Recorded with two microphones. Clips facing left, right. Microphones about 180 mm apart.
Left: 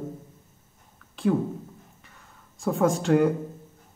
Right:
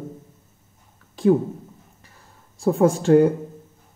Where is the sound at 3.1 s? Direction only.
25° right (ahead or behind).